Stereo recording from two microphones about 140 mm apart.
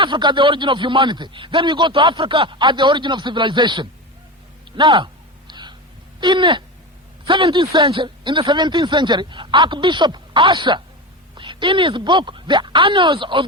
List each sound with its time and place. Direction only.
0.0 s a man's voice: 35° right (ahead or behind)
5.5 s whispering: 30° right (ahead or behind)
6.1 s a man's voice: 35° right (ahead or behind)